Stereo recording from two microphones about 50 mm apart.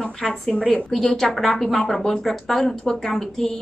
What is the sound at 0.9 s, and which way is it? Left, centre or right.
A woman's voice, centre.